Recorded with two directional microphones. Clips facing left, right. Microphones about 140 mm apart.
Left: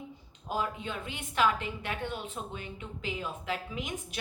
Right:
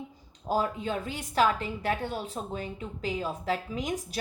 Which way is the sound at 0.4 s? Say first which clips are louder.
Right 5 dB; 40° right (ahead or behind).